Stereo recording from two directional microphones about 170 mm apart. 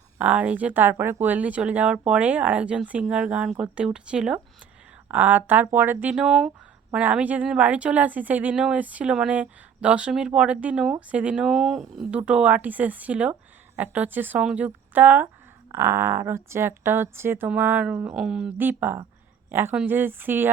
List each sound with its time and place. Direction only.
0.2 s speech: 10° right (ahead or behind)